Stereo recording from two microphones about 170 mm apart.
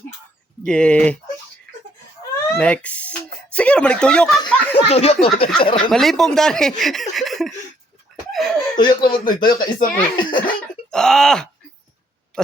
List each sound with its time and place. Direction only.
0.6 s speech: 5° left (ahead or behind)
2.3 s a sound: 10° left (ahead or behind)
3.5 s speech: 5° left (ahead or behind)
4.9 s speech: 35° left (ahead or behind)
5.9 s speech: centre (ahead or behind)
8.3 s a sound: centre (ahead or behind)
8.7 s speech: 25° left (ahead or behind)
10.9 s speech: 5° left (ahead or behind)